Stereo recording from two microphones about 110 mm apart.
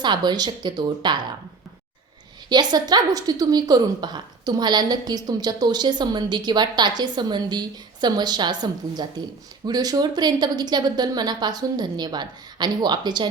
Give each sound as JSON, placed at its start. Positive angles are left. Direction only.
{"t": 0.0, "sound": "a woman's voice", "side_deg": -40}
{"t": 2.5, "sound": "a woman's voice", "side_deg": -40}